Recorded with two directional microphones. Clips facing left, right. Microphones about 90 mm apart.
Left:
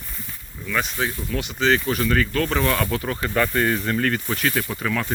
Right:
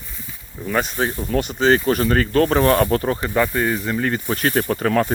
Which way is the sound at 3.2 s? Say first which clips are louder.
Right 2 dB; 15° right (ahead or behind).